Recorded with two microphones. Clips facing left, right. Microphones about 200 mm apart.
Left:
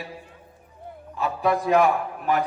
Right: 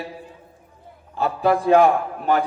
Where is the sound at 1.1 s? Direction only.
30° right (ahead or behind).